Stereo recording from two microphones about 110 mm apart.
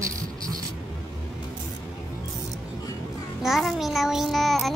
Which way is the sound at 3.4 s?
Centre (ahead or behind).